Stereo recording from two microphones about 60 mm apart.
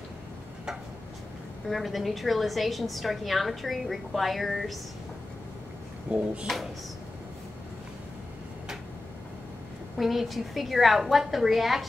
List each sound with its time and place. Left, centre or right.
1.7 s a woman's voice: centre
6.1 s speech: right
6.5 s a woman's voice: centre
9.9 s a woman's voice: centre